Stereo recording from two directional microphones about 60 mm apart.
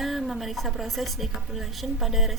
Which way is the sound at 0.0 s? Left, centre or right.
Centre.